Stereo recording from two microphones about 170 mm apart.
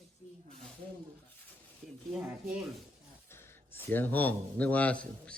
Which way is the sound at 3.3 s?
15° left (ahead or behind).